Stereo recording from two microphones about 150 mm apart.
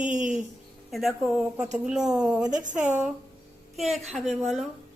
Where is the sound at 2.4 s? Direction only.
25° right (ahead or behind).